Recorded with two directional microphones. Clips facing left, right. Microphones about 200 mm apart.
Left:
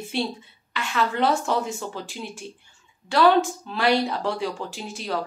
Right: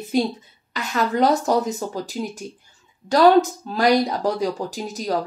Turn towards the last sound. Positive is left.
turn(degrees=-40)  # may be behind; listen again after turning